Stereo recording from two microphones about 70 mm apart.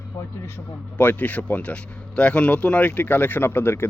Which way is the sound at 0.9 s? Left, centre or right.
Left.